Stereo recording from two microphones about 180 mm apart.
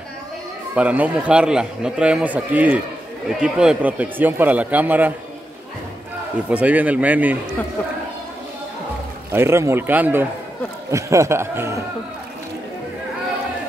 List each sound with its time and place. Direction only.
0.7 s a man's voice: 10° right (ahead or behind)
6.5 s a man's voice: 10° right (ahead or behind)
9.3 s a man's voice: 15° right (ahead or behind)